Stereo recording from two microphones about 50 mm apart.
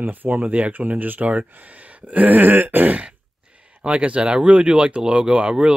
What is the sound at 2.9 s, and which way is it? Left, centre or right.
Speech, right.